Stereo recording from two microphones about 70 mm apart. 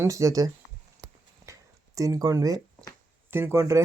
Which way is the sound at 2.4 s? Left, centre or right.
Right.